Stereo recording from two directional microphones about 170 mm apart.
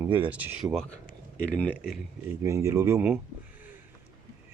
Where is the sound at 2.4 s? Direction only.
15° right (ahead or behind).